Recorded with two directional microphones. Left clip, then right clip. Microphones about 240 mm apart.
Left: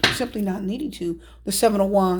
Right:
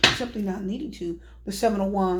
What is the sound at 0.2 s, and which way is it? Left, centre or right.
A woman's voice, left.